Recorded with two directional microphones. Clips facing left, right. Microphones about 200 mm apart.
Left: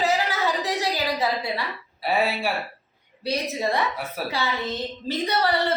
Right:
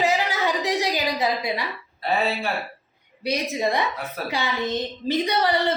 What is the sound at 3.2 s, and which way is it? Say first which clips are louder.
A woman's voice: right 2 dB; 15° right (ahead or behind).